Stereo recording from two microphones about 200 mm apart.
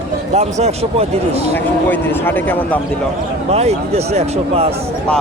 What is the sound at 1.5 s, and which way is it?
Speech, 10° left (ahead or behind).